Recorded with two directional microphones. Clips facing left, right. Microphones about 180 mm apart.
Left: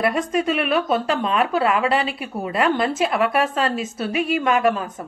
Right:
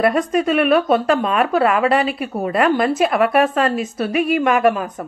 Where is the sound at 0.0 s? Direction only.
50° right (ahead or behind).